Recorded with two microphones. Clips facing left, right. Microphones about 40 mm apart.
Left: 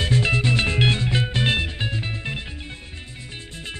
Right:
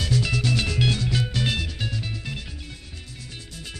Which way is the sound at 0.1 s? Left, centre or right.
Left.